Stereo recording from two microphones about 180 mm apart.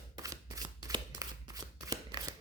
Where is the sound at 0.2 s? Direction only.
20° right (ahead or behind).